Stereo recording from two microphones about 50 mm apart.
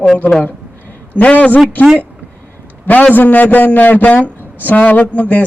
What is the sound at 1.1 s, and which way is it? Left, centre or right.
Speech, left.